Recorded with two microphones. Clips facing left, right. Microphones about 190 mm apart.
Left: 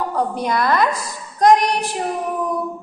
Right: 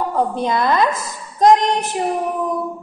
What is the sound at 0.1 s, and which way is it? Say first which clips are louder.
Speech: right 2 dB; 20° right (ahead or behind).